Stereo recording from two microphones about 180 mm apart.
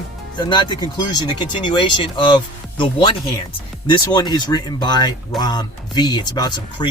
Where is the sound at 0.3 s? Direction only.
25° left (ahead or behind).